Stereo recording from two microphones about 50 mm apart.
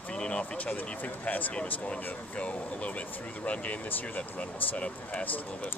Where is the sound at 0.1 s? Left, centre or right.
Left.